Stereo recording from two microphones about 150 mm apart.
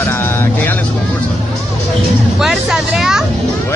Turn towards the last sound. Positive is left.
turn(degrees=-5)  # may be behind; listen again after turning